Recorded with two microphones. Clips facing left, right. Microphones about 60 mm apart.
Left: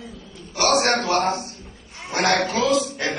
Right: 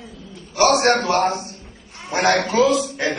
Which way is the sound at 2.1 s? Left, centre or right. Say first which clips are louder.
Right 4 dB; right.